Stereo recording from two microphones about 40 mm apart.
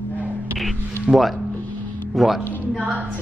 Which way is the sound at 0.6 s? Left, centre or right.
Centre.